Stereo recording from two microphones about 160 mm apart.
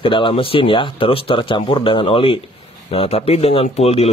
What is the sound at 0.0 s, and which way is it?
Speech, 35° left (ahead or behind).